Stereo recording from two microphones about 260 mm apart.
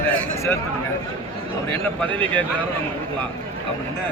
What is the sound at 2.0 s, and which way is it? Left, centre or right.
Speech, centre.